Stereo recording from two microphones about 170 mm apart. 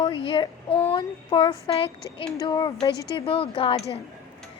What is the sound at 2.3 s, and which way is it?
Speech, 25° left (ahead or behind).